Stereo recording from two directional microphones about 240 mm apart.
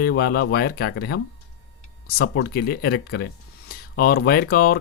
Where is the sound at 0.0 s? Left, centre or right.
Left.